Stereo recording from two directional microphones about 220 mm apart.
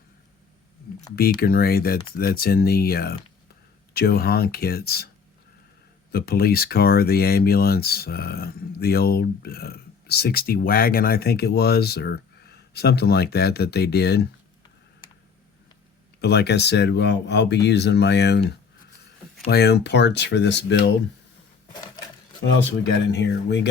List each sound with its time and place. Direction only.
1.4 s speech: 45° left (ahead or behind)
6.1 s speech: 45° left (ahead or behind)
16.2 s speech: 50° left (ahead or behind)
21.7 s typewriter: 20° left (ahead or behind)
23.1 s speech: 50° left (ahead or behind)